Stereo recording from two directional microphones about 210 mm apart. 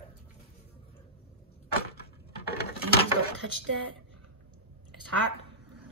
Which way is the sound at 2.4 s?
50° left (ahead or behind).